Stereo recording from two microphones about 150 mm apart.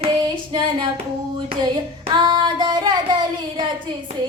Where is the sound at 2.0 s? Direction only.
30° right (ahead or behind).